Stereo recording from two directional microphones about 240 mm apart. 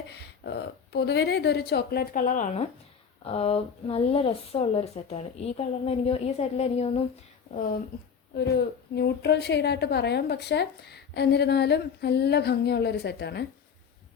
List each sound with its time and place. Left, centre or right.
0.4 s a woman's voice: left
8.4 s a woman's voice: left